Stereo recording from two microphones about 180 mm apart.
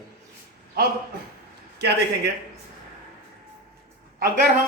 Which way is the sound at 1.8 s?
65° right (ahead or behind).